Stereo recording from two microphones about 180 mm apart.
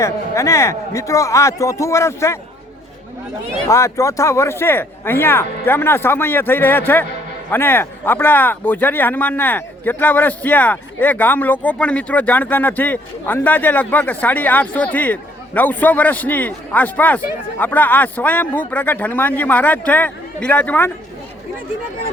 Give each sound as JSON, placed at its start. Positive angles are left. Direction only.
{"t": 0.0, "sound": "speech", "side_deg": 15}
{"t": 3.7, "sound": "speech", "side_deg": 15}